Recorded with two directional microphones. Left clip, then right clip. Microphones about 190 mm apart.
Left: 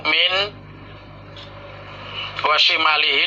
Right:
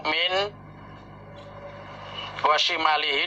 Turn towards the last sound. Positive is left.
turn(degrees=-45)  # may be behind; listen again after turning